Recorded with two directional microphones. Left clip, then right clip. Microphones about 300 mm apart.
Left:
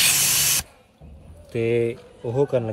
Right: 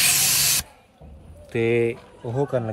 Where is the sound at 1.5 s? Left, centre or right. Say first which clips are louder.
Right 1 dB; right.